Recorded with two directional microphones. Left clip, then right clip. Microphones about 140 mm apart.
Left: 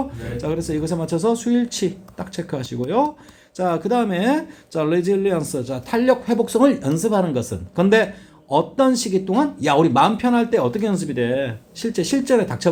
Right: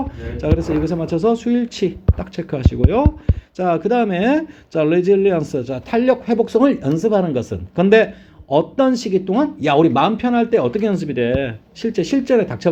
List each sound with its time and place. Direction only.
0.2 s speech: 40° right (ahead or behind)